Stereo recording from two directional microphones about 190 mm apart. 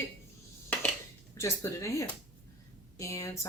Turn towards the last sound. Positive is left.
turn(degrees=15)  # may be behind; listen again after turning